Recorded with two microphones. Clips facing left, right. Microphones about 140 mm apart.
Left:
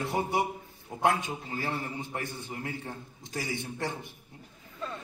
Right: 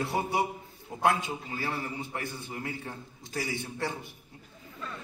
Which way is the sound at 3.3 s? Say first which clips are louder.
Right 1 dB; 15° left (ahead or behind).